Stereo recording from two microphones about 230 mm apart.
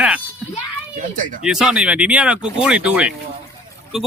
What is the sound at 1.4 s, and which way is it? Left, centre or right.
Speech, centre.